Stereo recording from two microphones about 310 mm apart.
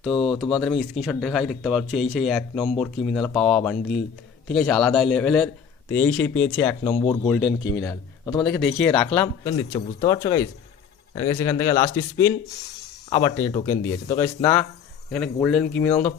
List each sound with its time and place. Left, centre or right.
0.4 s speech: centre
0.8 s a man's voice: centre
9.0 s a man's voice: centre